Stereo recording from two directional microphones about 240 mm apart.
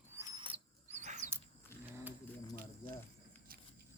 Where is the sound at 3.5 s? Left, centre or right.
Right.